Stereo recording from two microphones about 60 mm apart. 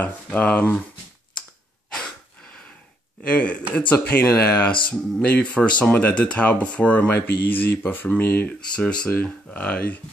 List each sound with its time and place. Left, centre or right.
0.0 s speech: left
2.0 s a sound: centre
3.3 s speech: left
3.9 s speech: left
4.6 s speech: left
8.7 s speech: left